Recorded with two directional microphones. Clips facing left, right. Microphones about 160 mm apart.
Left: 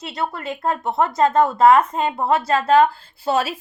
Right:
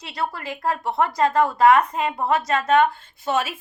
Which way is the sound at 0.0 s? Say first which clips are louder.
Left 2 dB; 25° left (ahead or behind).